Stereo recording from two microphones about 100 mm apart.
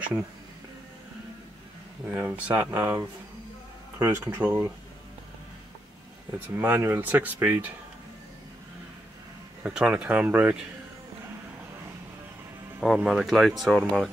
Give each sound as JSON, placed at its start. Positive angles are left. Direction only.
{"t": 2.1, "sound": "speech", "side_deg": -15}
{"t": 6.5, "sound": "speech", "side_deg": -20}
{"t": 9.6, "sound": "speech", "side_deg": -10}
{"t": 12.8, "sound": "speech", "side_deg": 0}